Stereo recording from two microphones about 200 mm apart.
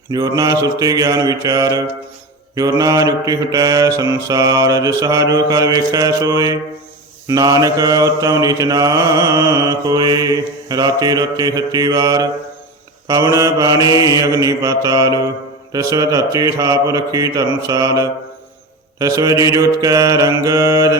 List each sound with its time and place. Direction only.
0.1 s mantra: 15° right (ahead or behind)
13.9 s mantra: 20° left (ahead or behind)
14.2 s mantra: 15° right (ahead or behind)